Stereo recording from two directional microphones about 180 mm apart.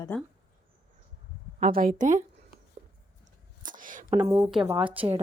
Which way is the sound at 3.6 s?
50° right (ahead or behind).